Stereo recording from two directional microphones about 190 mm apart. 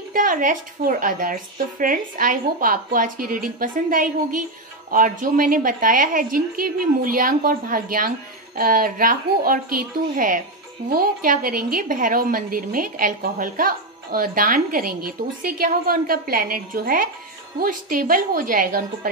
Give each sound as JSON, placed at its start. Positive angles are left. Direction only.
{"t": 0.1, "sound": "a woman's voice", "side_deg": -45}